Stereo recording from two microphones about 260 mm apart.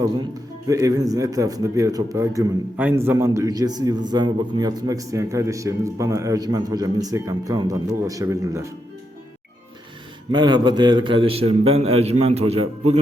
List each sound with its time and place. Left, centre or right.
0.7 s a man's voice: centre
10.3 s a man's voice: centre